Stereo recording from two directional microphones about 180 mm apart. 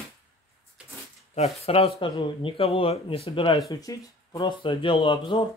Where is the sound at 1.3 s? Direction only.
35° left (ahead or behind).